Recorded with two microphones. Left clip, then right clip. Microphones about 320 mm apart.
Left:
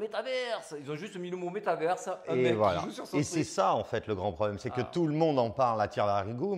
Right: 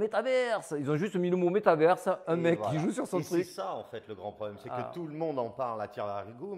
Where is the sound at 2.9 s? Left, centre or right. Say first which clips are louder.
Right 5 dB; right.